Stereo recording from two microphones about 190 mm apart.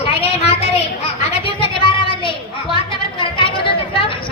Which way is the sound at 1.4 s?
25° left (ahead or behind).